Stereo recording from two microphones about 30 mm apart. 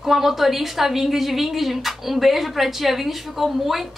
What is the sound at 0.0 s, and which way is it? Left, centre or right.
Speech, centre.